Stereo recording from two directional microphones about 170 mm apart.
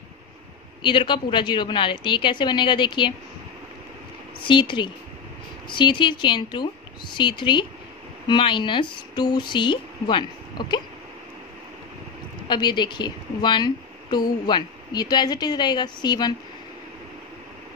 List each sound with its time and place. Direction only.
0.8 s speech: 30° left (ahead or behind)
4.5 s speech: 30° left (ahead or behind)
12.4 s speech: 25° left (ahead or behind)